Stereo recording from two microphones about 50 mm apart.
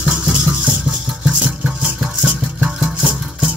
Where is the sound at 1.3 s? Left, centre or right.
Right.